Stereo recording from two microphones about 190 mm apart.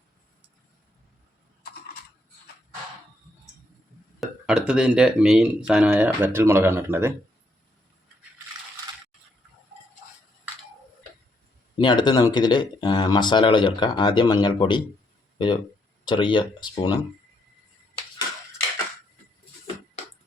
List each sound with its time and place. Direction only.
4.2 s speech: 5° right (ahead or behind)
11.8 s speech: 25° left (ahead or behind)
16.0 s speech: 25° left (ahead or behind)